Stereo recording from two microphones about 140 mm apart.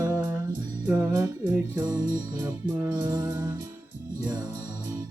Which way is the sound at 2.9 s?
25° right (ahead or behind).